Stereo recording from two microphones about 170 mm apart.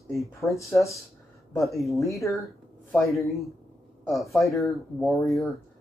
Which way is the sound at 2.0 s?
20° left (ahead or behind).